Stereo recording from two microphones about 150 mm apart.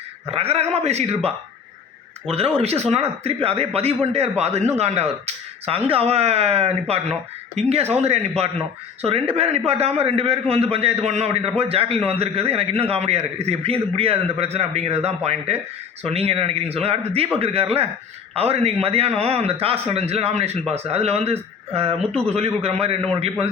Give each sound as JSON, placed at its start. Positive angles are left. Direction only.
{"t": 0.3, "sound": "a man's voice", "side_deg": -40}
{"t": 2.6, "sound": "a man's voice", "side_deg": -45}